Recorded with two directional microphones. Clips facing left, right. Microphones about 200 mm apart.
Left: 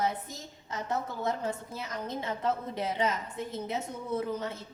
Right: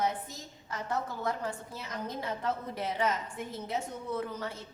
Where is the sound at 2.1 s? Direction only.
20° left (ahead or behind).